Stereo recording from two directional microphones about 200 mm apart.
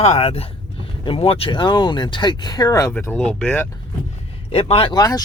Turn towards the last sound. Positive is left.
turn(degrees=20)  # may be behind; listen again after turning